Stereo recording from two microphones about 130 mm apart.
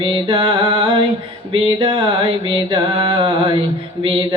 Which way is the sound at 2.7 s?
40° right (ahead or behind).